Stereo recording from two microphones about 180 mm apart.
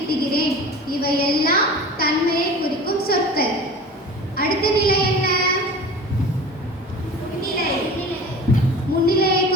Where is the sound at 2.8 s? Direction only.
55° left (ahead or behind).